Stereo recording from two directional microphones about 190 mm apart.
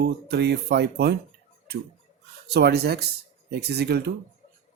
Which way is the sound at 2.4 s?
60° right (ahead or behind).